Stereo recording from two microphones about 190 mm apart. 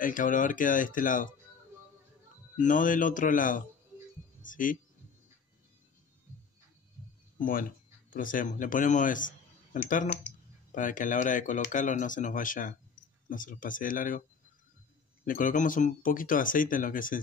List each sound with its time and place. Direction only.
0.0 s speech: 45° left (ahead or behind)
2.5 s speech: 40° left (ahead or behind)
7.3 s a man's voice: 45° left (ahead or behind)
15.2 s speech: 45° left (ahead or behind)